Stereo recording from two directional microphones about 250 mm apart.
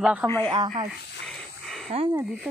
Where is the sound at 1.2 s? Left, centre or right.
Centre.